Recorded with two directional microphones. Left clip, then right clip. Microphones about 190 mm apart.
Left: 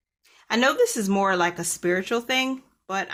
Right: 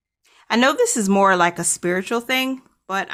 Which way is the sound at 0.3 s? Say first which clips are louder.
Right 3 dB; 25° right (ahead or behind).